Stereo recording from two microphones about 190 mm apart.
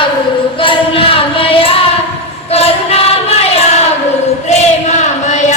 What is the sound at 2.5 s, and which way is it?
Choir, 30° left (ahead or behind).